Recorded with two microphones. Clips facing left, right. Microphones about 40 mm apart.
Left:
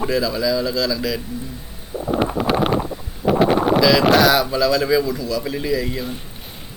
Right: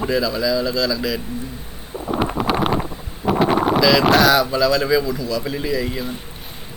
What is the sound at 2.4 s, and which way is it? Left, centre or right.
Wind noise, centre.